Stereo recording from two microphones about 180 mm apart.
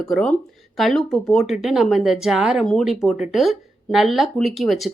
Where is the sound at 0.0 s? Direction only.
5° left (ahead or behind).